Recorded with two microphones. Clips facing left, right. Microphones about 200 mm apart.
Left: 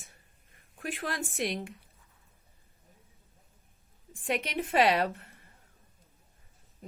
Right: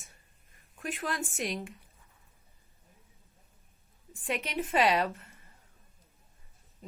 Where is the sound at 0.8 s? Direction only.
50° left (ahead or behind).